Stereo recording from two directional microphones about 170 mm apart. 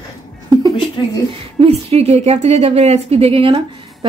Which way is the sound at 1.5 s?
35° right (ahead or behind).